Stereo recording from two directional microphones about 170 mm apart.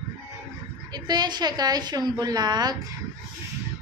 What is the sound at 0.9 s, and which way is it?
Child singing, 25° right (ahead or behind).